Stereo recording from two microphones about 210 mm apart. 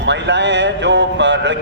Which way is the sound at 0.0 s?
55° right (ahead or behind).